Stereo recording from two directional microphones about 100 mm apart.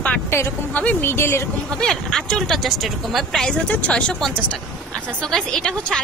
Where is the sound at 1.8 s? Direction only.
5° left (ahead or behind).